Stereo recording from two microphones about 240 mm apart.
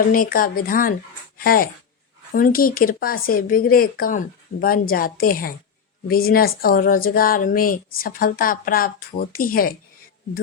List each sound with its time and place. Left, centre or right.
0.1 s speech: left